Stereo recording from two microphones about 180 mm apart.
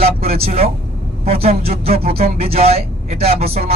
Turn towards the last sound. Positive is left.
turn(degrees=-35)  # may be behind; listen again after turning